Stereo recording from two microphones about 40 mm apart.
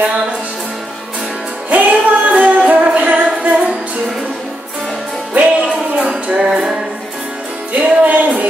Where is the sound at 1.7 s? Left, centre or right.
Right.